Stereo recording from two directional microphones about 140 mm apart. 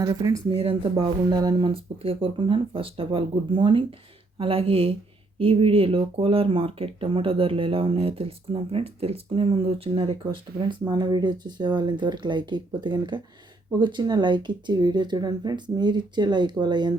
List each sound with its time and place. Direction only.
0.0 s speech: 25° right (ahead or behind)
0.5 s speech: 40° right (ahead or behind)
0.9 s speech: 30° right (ahead or behind)